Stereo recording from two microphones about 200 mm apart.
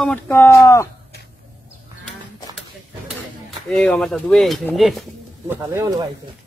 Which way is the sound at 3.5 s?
5° left (ahead or behind).